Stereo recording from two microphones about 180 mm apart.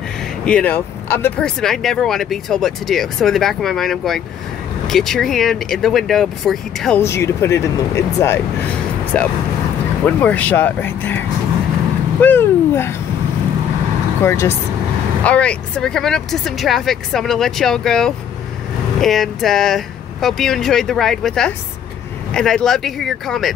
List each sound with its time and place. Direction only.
0.5 s speech: 10° left (ahead or behind)
7.0 s speech: 15° left (ahead or behind)
14.2 s speech: 15° left (ahead or behind)